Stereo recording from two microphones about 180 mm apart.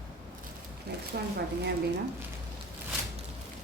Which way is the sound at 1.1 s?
60° right (ahead or behind).